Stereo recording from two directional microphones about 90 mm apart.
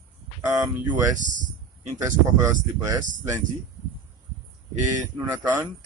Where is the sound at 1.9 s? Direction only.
30° right (ahead or behind).